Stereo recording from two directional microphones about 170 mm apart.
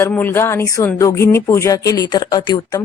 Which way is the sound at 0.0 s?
10° left (ahead or behind).